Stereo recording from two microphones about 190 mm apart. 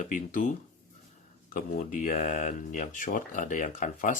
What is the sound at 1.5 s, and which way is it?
Speech, 50° left (ahead or behind).